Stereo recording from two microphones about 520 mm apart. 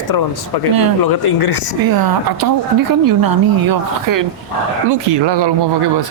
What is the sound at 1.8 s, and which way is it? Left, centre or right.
Speech, right.